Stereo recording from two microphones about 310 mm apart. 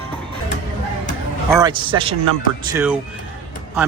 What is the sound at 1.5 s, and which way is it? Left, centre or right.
Speech, centre.